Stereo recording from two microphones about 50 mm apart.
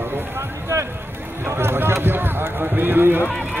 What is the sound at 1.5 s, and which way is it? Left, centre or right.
Run, right.